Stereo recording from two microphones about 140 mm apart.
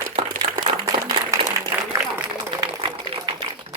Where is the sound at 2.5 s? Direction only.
40° right (ahead or behind).